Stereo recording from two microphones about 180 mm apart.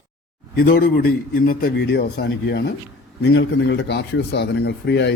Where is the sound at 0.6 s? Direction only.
55° left (ahead or behind).